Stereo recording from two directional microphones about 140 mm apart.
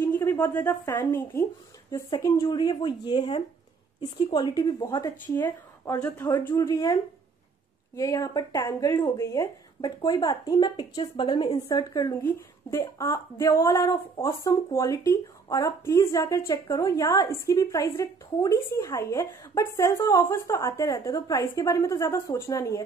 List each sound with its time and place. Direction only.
0.0 s a sound: 15° left (ahead or behind)
0.7 s a woman's voice: 20° left (ahead or behind)
5.2 s speech: 15° left (ahead or behind)
12.1 s speech: 15° left (ahead or behind)